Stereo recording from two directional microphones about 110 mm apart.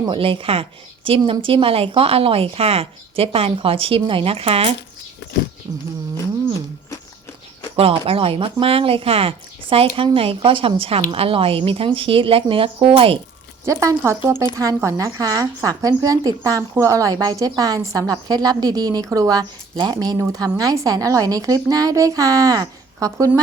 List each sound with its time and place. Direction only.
0.1 s speech: 55° right (ahead or behind)
7.8 s speech: 60° right (ahead or behind)
13.7 s a woman's voice: 25° right (ahead or behind)